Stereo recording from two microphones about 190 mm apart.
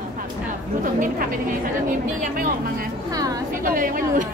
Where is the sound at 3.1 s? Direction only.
20° right (ahead or behind).